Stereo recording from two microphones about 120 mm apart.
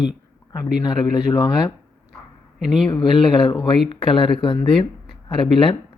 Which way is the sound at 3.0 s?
45° left (ahead or behind).